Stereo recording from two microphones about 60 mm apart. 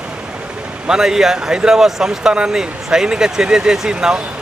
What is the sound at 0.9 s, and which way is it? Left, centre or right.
Speech, centre.